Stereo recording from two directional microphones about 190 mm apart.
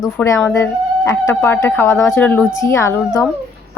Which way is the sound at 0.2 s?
10° left (ahead or behind).